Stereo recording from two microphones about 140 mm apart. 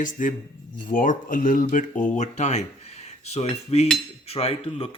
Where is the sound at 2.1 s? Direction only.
55° left (ahead or behind).